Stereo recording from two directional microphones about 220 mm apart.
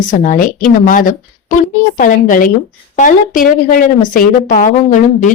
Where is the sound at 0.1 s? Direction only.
35° left (ahead or behind).